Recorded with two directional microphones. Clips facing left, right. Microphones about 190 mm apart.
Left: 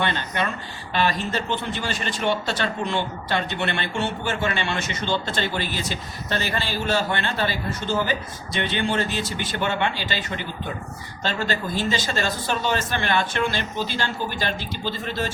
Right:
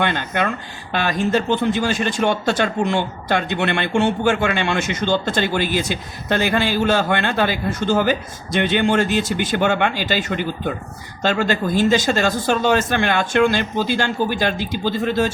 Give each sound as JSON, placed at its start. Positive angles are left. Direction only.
{"t": 0.0, "sound": "speech", "side_deg": -55}